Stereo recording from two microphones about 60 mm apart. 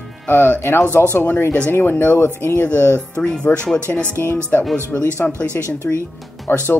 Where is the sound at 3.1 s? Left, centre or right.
Centre.